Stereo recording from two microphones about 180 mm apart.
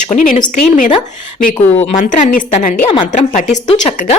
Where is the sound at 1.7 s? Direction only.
35° left (ahead or behind).